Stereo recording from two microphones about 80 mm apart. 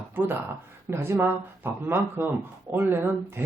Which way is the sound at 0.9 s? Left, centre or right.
Right.